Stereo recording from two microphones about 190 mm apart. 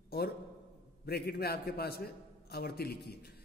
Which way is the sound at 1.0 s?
55° left (ahead or behind).